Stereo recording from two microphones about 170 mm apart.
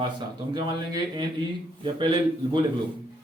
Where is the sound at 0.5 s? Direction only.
25° right (ahead or behind).